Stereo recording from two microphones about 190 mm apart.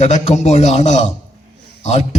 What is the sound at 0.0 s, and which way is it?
A man's voice, 35° left (ahead or behind).